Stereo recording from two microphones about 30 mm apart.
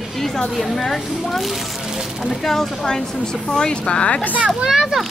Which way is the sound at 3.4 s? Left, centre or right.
Left.